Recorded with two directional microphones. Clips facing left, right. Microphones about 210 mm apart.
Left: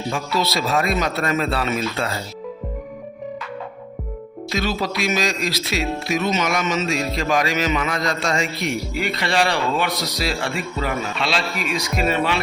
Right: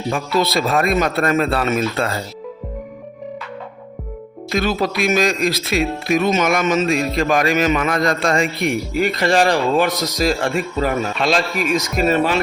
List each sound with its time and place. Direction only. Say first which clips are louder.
0.1 s speech: right 5 dB; 55° right (ahead or behind)
4.5 s speech: right 4 dB; 55° right (ahead or behind)